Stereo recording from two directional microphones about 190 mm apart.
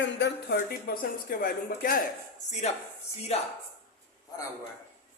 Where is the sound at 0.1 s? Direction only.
65° left (ahead or behind); by 2.0 s 50° left (ahead or behind).